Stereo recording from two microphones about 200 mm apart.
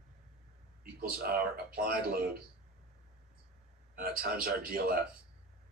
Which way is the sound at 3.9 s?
45° right (ahead or behind).